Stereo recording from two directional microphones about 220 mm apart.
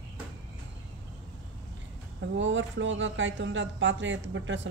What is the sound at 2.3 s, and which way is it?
Speech, 55° right (ahead or behind).